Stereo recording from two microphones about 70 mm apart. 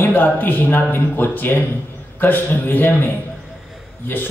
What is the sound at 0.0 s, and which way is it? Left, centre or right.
A man's voice, left.